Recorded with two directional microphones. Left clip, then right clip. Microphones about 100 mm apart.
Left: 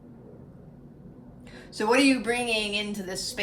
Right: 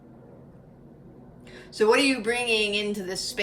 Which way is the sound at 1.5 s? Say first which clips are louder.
Right 2 dB; 30° left (ahead or behind).